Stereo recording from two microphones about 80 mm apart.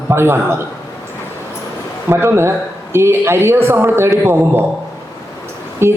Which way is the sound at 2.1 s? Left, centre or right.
Right.